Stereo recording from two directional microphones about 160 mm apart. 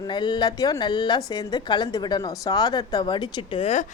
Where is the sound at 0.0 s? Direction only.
30° left (ahead or behind).